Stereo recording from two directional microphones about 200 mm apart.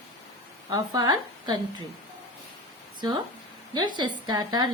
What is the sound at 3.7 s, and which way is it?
Speech, 20° right (ahead or behind).